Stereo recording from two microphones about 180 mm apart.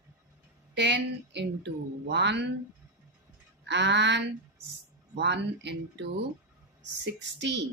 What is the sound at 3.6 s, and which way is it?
Speech, 75° right (ahead or behind).